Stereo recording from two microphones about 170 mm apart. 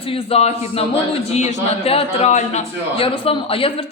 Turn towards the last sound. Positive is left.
turn(degrees=30)  # may be behind; listen again after turning